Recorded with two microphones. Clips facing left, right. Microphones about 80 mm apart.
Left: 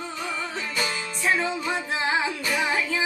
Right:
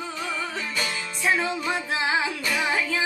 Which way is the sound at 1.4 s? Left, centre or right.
Centre.